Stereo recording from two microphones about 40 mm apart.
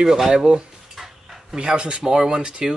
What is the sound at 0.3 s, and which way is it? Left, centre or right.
Speech, centre.